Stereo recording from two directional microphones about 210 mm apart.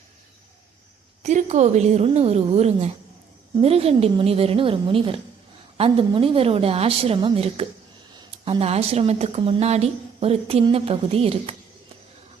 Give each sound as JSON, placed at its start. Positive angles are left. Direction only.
{"t": 1.2, "sound": "a woman's voice", "side_deg": -35}